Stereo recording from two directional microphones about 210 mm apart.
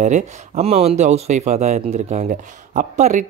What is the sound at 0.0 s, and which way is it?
Speech, 30° right (ahead or behind).